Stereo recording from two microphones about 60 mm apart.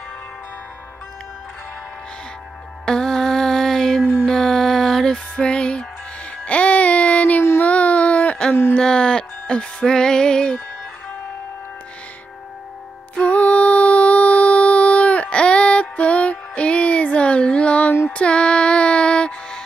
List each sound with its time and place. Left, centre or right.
2.8 s music: centre
4.0 s music: left
4.3 s music: centre; by 7.4 s left
7.6 s a sound: left
8.7 s music: centre
13.1 s music: left